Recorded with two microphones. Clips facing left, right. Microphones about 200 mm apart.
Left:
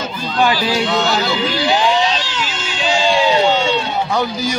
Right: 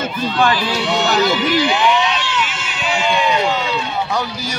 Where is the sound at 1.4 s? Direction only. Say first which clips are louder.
Right 1 dB; 30° left (ahead or behind).